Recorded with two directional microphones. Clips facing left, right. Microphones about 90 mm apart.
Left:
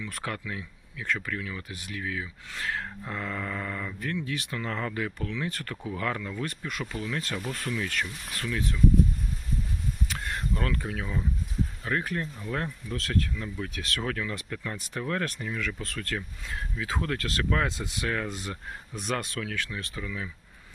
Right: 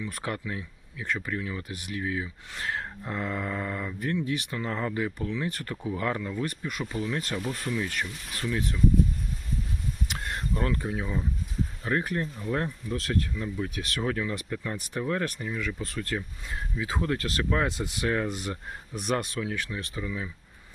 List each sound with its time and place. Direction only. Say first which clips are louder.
0.3 s speech: right 2 dB; 25° right (ahead or behind)
6.0 s speech: right 1 dB; 20° right (ahead or behind)
6.8 s speech: right 3 dB; 20° right (ahead or behind)
10.5 s speech: right 4 dB; 20° right (ahead or behind)
11.9 s speech: right 3 dB; 25° right (ahead or behind)
18.3 s speech: right 3 dB; 10° right (ahead or behind)